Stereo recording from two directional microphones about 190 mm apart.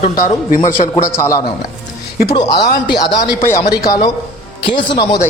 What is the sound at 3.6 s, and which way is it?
Speech, 55° left (ahead or behind).